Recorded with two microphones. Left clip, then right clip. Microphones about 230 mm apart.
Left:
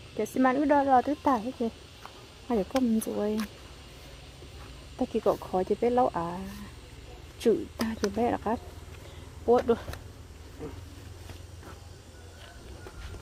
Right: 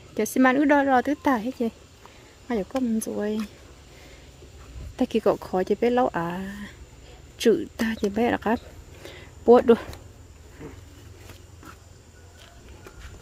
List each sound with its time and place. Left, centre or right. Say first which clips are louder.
0.2 s speech: right 5 dB; right
2.5 s speech: right 1 dB; centre
4.9 s speech: right 5 dB; right
9.6 s speech: right 8 dB; right